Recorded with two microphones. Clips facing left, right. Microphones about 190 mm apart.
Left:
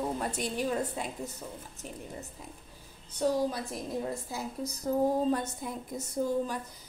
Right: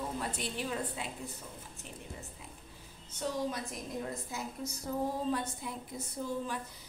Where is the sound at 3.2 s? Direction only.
35° left (ahead or behind).